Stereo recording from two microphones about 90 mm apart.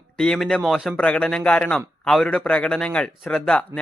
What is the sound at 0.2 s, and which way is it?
Speech, 5° left (ahead or behind).